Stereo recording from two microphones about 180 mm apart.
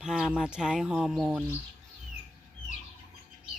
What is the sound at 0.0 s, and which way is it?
Speech, 5° right (ahead or behind).